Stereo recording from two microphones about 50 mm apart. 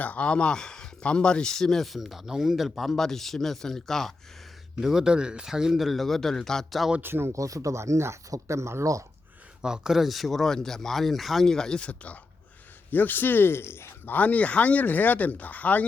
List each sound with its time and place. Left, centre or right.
0.0 s speech: left; by 4.1 s centre
4.8 s speech: centre
7.0 s speech: right
7.3 s speech: right
9.6 s speech: centre
11.8 s speech: left
12.9 s speech: left
14.1 s speech: left